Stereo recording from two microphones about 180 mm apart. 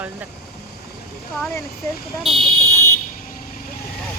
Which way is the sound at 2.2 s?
Centre (ahead or behind).